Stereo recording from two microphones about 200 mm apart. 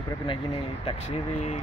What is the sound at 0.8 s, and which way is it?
Speech, 35° left (ahead or behind).